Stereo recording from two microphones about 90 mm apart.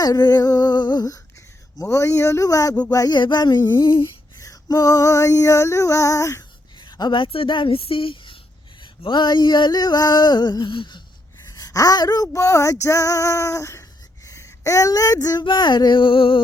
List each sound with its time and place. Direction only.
0.0 s speech: 45° left (ahead or behind)
1.8 s female singing: 35° left (ahead or behind)
3.2 s speech: 55° left (ahead or behind)
3.8 s humming: 65° left (ahead or behind)
4.4 s female singing: 40° left (ahead or behind)
7.1 s speech: 70° left (ahead or behind)
9.0 s speech: 55° left (ahead or behind)
11.4 s speech: 40° left (ahead or behind)
12.8 s female singing: 35° left (ahead or behind)
14.3 s speech: 35° left (ahead or behind); by 16.4 s 75° left (ahead or behind)